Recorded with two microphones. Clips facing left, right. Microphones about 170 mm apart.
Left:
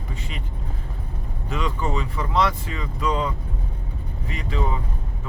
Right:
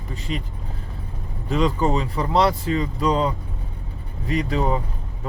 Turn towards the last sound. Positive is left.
turn(degrees=-40)  # may be behind; listen again after turning